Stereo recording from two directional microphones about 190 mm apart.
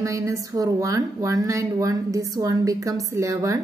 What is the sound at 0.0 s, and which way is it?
A woman's voice, 15° right (ahead or behind).